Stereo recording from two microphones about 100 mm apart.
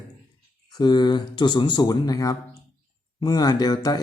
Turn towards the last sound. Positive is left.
turn(degrees=45)  # may be behind; listen again after turning